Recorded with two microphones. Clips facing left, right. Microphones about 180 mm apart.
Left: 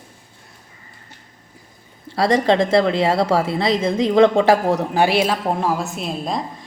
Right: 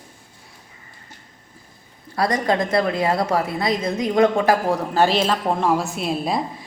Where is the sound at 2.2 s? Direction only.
25° left (ahead or behind); by 6.4 s 5° right (ahead or behind).